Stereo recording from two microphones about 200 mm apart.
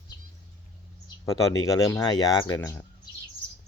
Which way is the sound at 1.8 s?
15° left (ahead or behind).